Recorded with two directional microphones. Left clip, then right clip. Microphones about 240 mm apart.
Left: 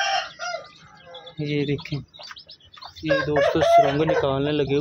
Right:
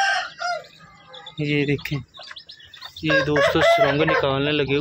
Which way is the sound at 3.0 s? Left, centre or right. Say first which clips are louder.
Right 2 dB; centre.